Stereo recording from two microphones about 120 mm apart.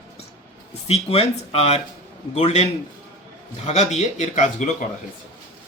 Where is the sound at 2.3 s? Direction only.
70° left (ahead or behind); by 4.7 s 90° left.